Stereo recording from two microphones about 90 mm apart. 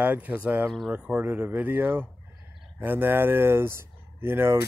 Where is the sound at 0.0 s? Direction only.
15° right (ahead or behind).